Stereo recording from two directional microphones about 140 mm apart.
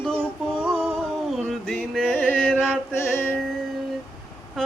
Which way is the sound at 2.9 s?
20° left (ahead or behind).